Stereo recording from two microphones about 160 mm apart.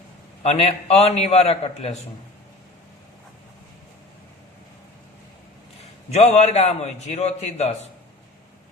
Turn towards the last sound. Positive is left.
turn(degrees=45)  # may be behind; listen again after turning